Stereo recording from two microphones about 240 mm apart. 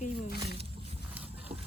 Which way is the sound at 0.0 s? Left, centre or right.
Left.